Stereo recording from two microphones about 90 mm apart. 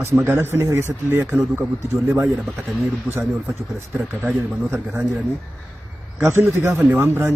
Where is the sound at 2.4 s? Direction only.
Centre (ahead or behind).